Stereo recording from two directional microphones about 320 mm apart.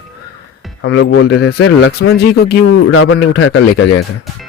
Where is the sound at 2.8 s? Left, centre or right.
Left.